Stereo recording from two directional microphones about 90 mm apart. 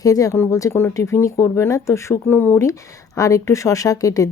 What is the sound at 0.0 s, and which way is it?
Speech, 40° left (ahead or behind).